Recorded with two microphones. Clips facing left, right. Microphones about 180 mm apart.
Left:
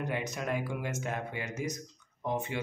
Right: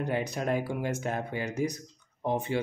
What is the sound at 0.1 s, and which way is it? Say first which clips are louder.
Speech: right 7 dB; 35° right (ahead or behind).